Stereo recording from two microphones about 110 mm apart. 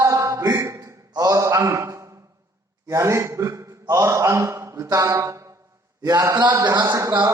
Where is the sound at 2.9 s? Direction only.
25° right (ahead or behind).